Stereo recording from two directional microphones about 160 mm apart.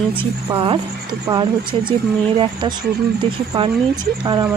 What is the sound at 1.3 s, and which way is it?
Speech, 30° right (ahead or behind).